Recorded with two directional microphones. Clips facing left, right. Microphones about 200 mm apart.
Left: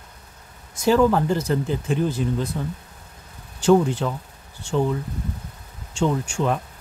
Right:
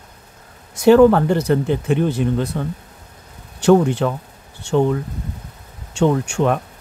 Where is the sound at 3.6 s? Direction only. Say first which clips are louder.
Right 4 dB; 65° right (ahead or behind).